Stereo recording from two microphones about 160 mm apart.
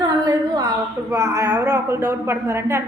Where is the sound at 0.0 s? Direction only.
25° right (ahead or behind).